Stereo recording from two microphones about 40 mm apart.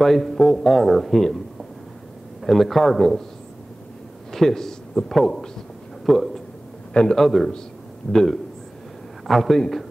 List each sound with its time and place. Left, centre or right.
0.0 s a man's voice: centre
2.4 s a man's voice: centre
4.3 s a man's voice: centre
6.9 s a man's voice: left
7.2 s a man's voice: centre